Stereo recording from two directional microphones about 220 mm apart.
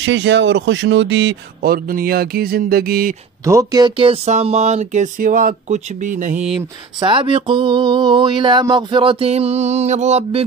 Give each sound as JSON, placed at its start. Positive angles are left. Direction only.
{"t": 0.0, "sound": "speech", "side_deg": -55}
{"t": 3.4, "sound": "speech", "side_deg": -15}
{"t": 6.3, "sound": "speech", "side_deg": -5}
{"t": 7.0, "sound": "a sound", "side_deg": -25}